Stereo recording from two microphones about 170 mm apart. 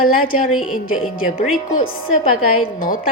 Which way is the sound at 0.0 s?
55° left (ahead or behind).